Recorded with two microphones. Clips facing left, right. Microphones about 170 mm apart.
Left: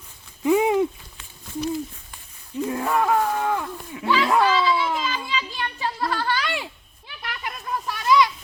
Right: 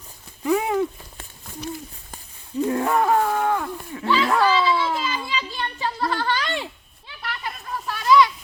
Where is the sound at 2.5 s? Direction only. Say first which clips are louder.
Right 3 dB; 35° right (ahead or behind).